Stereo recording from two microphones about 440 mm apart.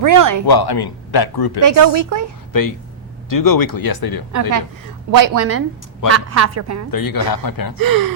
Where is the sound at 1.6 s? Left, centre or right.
Right.